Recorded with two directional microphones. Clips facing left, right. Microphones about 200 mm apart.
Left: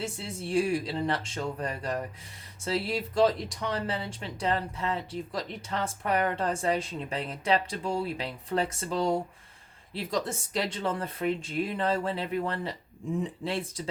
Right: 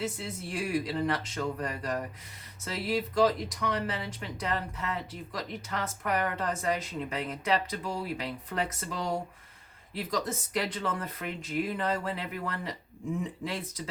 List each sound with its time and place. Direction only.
0.0 s speech: 30° left (ahead or behind)